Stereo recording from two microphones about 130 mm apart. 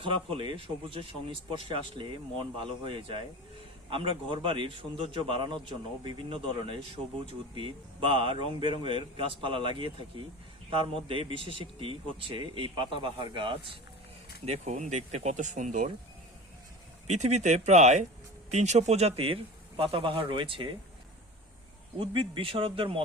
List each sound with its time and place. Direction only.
0.0 s a man's voice: 40° right (ahead or behind)
14.4 s speech: 60° right (ahead or behind)
17.1 s a man's voice: 60° right (ahead or behind); by 20.7 s 40° right (ahead or behind)
21.9 s a man's voice: 40° right (ahead or behind)